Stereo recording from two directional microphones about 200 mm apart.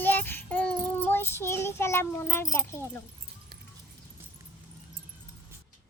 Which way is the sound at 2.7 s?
15° left (ahead or behind).